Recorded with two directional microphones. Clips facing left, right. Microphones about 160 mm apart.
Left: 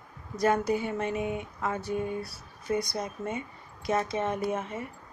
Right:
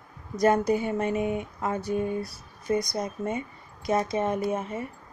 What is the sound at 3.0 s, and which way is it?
Speech, 40° right (ahead or behind).